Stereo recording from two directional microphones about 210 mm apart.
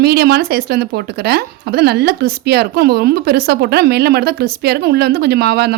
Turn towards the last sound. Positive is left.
turn(degrees=-50)  # may be behind; listen again after turning